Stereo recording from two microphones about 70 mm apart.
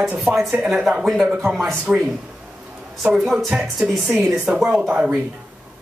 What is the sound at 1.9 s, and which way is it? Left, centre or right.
Speech, right.